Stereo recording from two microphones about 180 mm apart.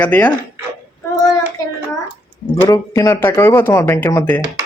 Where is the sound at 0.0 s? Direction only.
10° left (ahead or behind).